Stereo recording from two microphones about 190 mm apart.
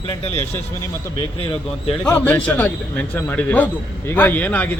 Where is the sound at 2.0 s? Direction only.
10° left (ahead or behind).